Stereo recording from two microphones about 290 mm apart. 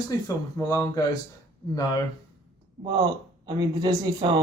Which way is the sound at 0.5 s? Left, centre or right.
Centre.